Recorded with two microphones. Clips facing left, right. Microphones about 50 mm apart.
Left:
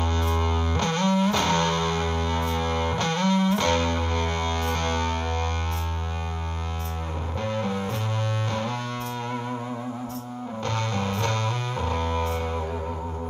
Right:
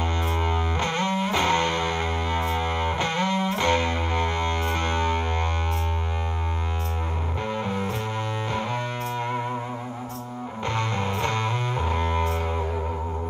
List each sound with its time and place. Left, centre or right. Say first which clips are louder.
0.3 s music: even; centre
7.4 s music: left 1 dB; centre
10.7 s music: right 1 dB; centre